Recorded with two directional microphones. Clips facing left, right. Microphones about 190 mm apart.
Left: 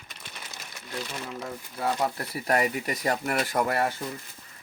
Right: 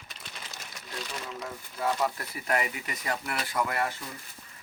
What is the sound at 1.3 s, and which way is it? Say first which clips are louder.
Speech: left 2 dB; 35° left (ahead or behind).